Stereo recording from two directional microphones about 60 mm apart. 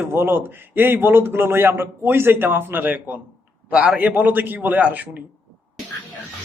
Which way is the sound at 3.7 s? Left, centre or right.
Centre.